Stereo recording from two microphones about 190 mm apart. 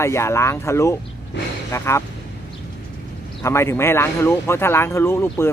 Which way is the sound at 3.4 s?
15° left (ahead or behind).